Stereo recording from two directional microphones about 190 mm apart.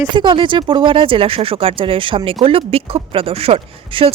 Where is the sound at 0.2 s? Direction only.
25° right (ahead or behind).